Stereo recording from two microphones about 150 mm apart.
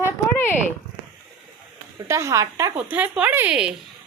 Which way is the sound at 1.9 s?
20° right (ahead or behind).